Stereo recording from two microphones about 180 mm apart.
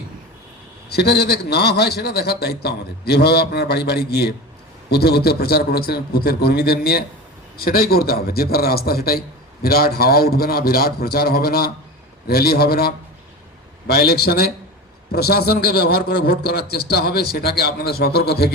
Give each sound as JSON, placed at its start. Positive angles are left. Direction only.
{"t": 0.9, "sound": "a man's voice", "side_deg": 65}